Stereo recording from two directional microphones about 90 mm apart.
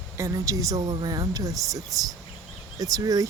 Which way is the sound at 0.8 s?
50° right (ahead or behind).